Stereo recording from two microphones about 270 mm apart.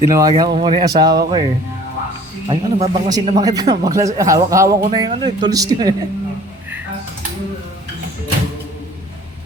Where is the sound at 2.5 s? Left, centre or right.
Centre.